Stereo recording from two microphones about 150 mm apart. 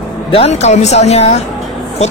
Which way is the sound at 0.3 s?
45° left (ahead or behind).